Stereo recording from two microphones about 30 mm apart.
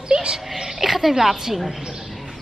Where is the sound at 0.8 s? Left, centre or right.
Centre.